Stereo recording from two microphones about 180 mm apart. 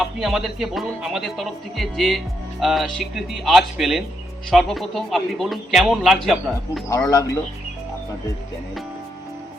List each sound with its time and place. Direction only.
0.0 s speech: centre (ahead or behind)
7.1 s speech: 20° left (ahead or behind)